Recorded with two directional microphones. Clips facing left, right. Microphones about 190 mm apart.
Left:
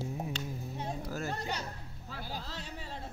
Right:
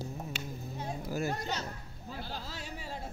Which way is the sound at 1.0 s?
10° right (ahead or behind).